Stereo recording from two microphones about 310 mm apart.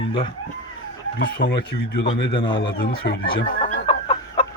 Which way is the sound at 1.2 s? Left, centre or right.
Left.